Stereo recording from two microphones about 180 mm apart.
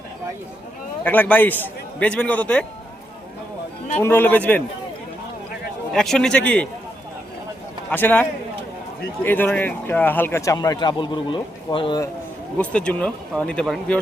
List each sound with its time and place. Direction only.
1.0 s speech: 10° left (ahead or behind)
4.0 s speech: 10° left (ahead or behind)
5.9 s speech: 5° left (ahead or behind)
7.9 s speech: 10° left (ahead or behind); by 12.0 s 25° left (ahead or behind)
12.5 s speech: 5° left (ahead or behind)